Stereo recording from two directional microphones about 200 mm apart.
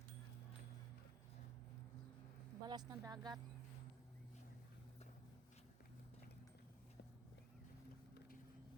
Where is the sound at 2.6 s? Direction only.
20° right (ahead or behind).